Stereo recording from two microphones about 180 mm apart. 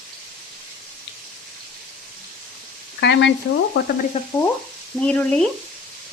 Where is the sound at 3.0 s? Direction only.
75° left (ahead or behind).